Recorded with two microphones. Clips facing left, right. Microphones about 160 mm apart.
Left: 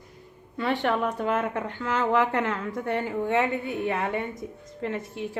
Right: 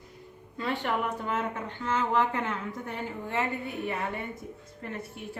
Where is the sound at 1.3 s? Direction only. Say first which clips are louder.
Left 4 dB; 90° left.